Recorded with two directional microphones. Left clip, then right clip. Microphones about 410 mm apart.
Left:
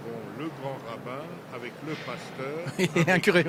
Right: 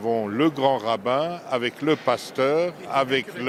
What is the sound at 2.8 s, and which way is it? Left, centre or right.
Speech, left.